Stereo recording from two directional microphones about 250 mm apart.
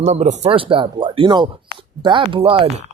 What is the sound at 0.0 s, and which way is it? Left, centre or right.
Speech, right.